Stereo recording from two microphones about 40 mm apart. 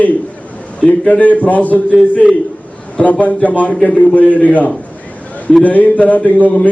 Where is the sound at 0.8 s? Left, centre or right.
Left.